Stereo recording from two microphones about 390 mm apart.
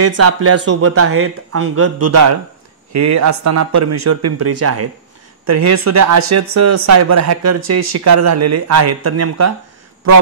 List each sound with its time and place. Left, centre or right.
0.0 s speech: right